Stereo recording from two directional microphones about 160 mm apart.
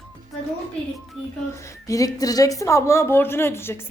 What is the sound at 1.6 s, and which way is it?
A woman's voice, 20° left (ahead or behind).